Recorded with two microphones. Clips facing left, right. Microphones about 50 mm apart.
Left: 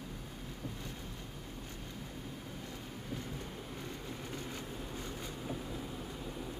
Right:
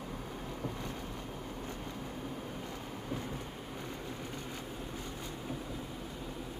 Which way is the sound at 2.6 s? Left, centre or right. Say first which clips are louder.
Right 4 dB; right.